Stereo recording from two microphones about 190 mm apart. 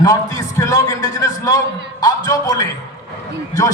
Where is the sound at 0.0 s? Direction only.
20° left (ahead or behind).